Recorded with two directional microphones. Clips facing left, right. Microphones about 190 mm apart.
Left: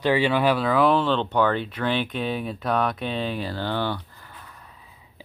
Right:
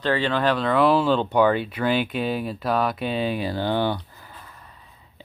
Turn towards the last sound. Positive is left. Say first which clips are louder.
# even
turn(degrees=0)  # may be behind; listen again after turning